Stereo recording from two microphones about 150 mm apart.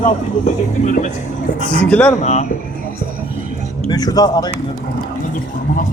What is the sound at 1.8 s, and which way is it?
Speech, 10° left (ahead or behind).